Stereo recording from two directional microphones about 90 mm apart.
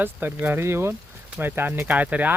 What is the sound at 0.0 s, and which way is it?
Speech, 25° right (ahead or behind).